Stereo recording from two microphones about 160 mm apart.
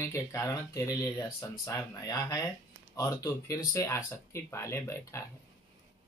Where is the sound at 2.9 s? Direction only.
20° left (ahead or behind).